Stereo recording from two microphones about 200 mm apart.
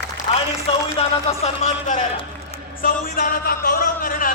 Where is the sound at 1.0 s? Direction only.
30° left (ahead or behind).